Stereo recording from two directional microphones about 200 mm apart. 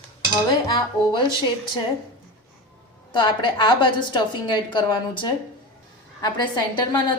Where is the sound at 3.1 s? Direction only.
25° left (ahead or behind).